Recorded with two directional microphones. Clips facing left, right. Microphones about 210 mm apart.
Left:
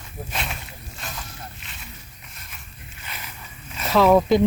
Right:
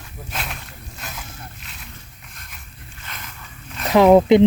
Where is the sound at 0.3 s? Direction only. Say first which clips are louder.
Right 1 dB; centre (ahead or behind).